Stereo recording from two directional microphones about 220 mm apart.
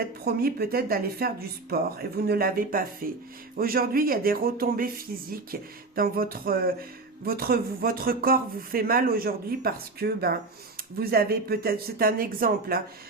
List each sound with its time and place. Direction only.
0.3 s speech: 45° right (ahead or behind)
3.6 s a sound: 40° right (ahead or behind)
7.3 s speech: 45° right (ahead or behind)